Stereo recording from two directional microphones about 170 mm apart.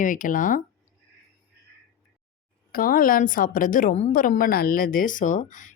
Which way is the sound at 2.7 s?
55° left (ahead or behind).